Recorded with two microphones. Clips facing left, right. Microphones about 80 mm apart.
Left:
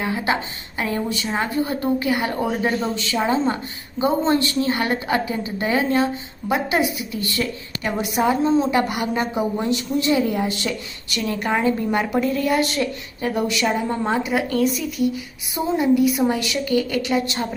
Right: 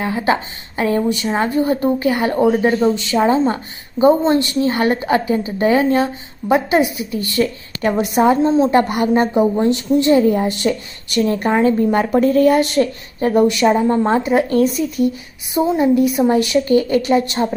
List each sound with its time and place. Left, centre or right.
0.0 s a woman's voice: right
8.4 s a woman's voice: right
8.7 s a woman's voice: right
12.2 s a woman's voice: right
12.5 s a woman's voice: right